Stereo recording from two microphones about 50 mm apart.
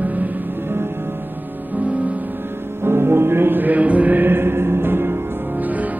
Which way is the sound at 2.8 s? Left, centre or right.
Right.